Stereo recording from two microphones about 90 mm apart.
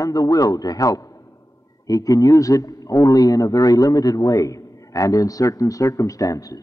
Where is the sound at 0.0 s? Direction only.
40° left (ahead or behind).